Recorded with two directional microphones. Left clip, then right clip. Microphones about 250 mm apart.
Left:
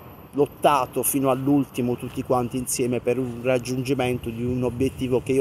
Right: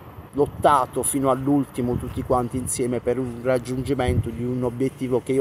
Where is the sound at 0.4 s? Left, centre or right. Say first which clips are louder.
Right 1 dB; centre.